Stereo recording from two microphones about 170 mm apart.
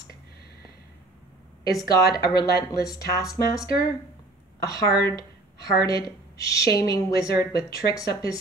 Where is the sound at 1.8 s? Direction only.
20° left (ahead or behind).